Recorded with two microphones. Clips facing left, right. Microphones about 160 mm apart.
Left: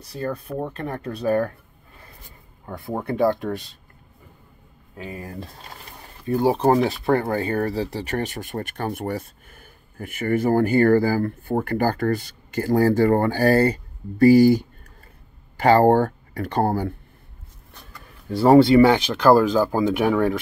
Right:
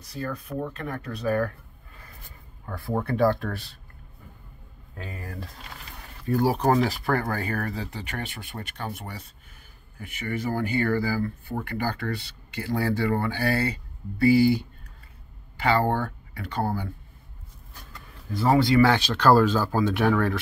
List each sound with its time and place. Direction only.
0.1 s speech: 30° left (ahead or behind)
2.6 s speech: 20° left (ahead or behind)
4.9 s speech: 15° left (ahead or behind); by 16.9 s 50° left (ahead or behind)
18.3 s speech: 30° left (ahead or behind)